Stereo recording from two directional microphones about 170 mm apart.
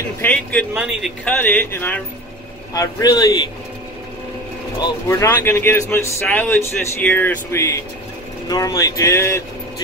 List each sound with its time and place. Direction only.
0.2 s speech: 10° left (ahead or behind)
2.7 s speech: 20° left (ahead or behind)
4.7 s speech: 20° left (ahead or behind)